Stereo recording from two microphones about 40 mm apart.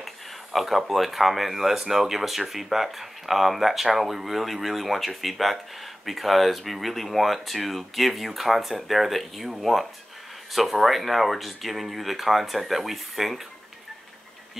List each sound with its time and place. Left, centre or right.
0.0 s speech: centre